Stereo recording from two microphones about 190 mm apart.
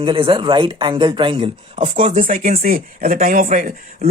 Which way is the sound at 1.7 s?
40° right (ahead or behind).